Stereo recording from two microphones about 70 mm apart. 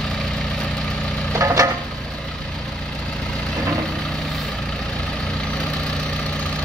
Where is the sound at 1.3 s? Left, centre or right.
Right.